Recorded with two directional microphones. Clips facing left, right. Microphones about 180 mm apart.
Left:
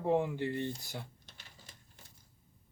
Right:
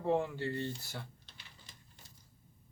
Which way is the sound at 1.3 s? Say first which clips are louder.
Left 1 dB; 45° left (ahead or behind).